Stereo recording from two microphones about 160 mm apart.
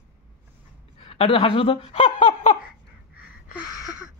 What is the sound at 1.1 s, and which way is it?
Speech, 35° left (ahead or behind).